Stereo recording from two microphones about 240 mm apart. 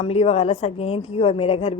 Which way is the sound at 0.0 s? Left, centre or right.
Left.